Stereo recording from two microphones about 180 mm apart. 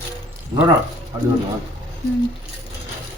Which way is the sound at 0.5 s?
20° right (ahead or behind).